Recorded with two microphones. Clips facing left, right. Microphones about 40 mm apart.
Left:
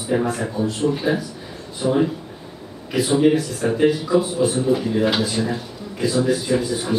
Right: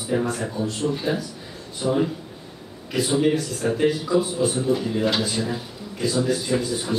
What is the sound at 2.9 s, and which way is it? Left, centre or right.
A man's voice, centre.